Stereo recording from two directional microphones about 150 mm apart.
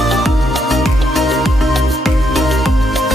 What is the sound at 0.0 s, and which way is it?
Music, centre (ahead or behind).